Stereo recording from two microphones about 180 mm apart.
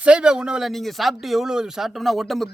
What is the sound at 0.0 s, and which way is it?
Speech, 5° right (ahead or behind).